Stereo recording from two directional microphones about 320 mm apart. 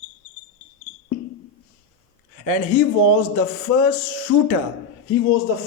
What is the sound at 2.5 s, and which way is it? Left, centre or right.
A man's voice, left.